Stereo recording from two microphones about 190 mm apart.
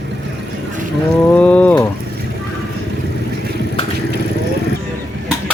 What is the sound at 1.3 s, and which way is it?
Speech, 5° left (ahead or behind).